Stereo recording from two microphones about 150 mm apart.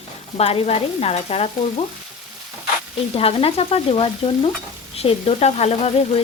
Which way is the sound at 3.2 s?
40° left (ahead or behind).